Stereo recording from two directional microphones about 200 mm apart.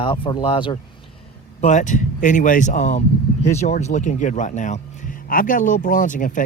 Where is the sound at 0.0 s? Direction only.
25° left (ahead or behind).